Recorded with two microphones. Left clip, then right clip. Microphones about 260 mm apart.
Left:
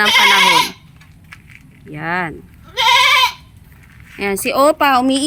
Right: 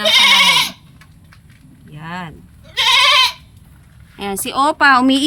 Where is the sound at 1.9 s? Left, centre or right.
Centre.